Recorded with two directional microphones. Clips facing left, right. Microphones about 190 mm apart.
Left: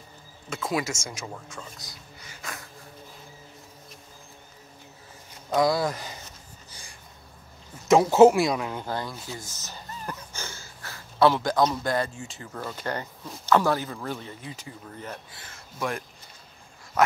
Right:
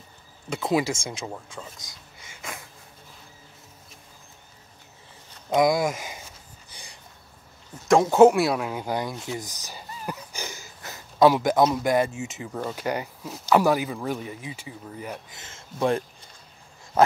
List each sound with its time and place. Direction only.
0.6 s speech: 25° right (ahead or behind)
5.5 s speech: 15° right (ahead or behind)
7.9 s a man's voice: centre (ahead or behind)
8.8 s speech: 15° right (ahead or behind)
9.2 s a sound: 20° right (ahead or behind)
11.6 s speech: 15° right (ahead or behind)
15.3 s speech: 25° right (ahead or behind)